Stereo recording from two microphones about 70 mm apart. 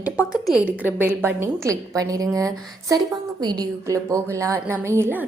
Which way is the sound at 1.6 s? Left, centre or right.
Right.